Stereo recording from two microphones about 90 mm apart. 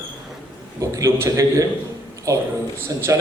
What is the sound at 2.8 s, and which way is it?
Speech, 35° right (ahead or behind).